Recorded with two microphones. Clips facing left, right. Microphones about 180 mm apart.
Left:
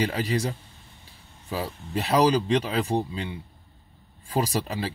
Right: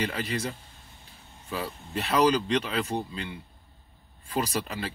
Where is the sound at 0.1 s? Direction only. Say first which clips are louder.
Left 5 dB; 35° left (ahead or behind).